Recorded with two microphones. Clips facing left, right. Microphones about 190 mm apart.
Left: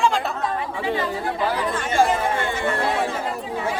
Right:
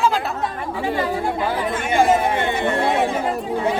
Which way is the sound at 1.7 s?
20° right (ahead or behind).